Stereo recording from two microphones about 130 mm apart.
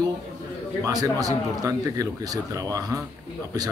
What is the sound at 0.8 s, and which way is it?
Speech, 30° right (ahead or behind).